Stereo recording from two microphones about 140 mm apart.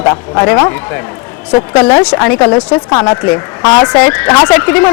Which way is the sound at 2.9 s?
35° left (ahead or behind).